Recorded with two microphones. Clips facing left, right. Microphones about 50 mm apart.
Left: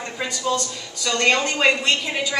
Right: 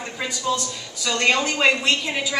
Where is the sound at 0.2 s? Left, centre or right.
Centre.